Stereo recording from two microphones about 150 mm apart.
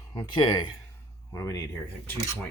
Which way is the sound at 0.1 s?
30° left (ahead or behind).